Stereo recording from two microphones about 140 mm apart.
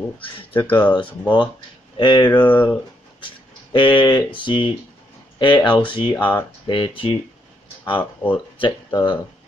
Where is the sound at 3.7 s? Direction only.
40° left (ahead or behind).